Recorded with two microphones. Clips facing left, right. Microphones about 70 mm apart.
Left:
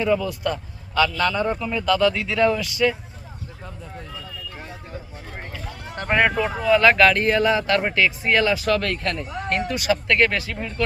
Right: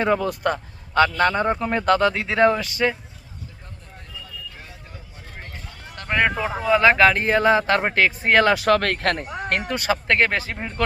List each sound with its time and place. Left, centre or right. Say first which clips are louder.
0.0 s speech: right 1 dB; right
6.1 s speech: left 2 dB; left
6.7 s speech: even; right